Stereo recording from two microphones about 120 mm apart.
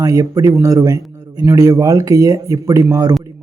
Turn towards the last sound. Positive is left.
turn(degrees=-30)  # may be behind; listen again after turning